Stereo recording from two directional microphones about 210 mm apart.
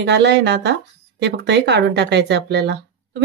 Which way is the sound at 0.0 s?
55° right (ahead or behind).